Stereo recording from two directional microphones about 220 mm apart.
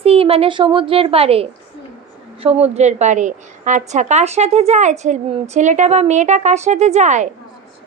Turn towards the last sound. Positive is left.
turn(degrees=-35)  # may be behind; listen again after turning